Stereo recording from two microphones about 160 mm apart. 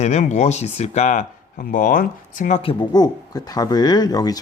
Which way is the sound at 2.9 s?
25° left (ahead or behind).